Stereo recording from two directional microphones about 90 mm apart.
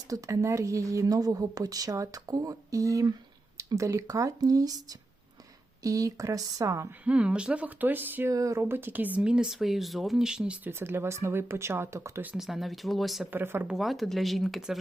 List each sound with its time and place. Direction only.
0.1 s speech: 35° right (ahead or behind)
7.0 s speech: 15° right (ahead or behind)
8.3 s speech: 35° right (ahead or behind); by 10.7 s 10° right (ahead or behind)
10.7 s speech: 25° right (ahead or behind)
12.4 s speech: centre (ahead or behind)
13.3 s speech: 25° right (ahead or behind)
13.7 s speech: centre (ahead or behind)